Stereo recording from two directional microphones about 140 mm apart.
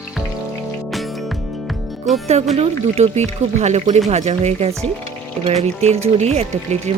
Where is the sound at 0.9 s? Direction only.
Centre (ahead or behind).